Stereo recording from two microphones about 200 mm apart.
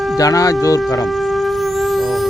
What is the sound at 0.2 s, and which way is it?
Speech, 15° left (ahead or behind).